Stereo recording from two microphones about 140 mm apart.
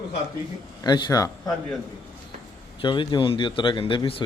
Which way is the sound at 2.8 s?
35° left (ahead or behind).